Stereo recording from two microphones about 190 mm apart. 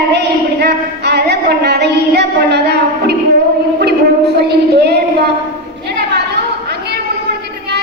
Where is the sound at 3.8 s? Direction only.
60° right (ahead or behind).